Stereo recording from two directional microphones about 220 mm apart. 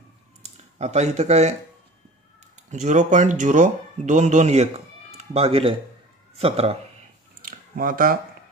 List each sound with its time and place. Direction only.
0.4 s speech: 30° right (ahead or behind)
2.7 s speech: 35° right (ahead or behind)
7.4 s camera: 40° right (ahead or behind)